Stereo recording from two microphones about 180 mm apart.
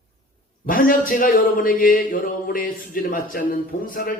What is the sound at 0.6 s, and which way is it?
Speech, 50° left (ahead or behind).